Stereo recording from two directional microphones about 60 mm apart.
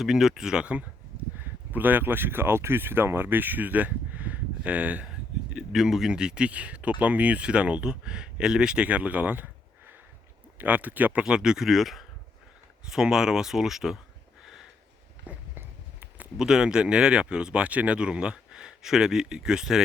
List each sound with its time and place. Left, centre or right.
0.0 s speech: centre; by 5.0 s right
5.5 s speech: centre; by 9.5 s right
10.6 s speech: right; by 14.0 s centre
14.4 s a sound: centre
16.4 s speech: centre